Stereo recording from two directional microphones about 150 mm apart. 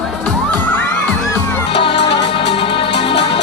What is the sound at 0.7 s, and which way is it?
Children shouting, 15° left (ahead or behind).